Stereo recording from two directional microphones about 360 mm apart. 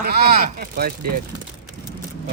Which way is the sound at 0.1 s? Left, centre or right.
Right.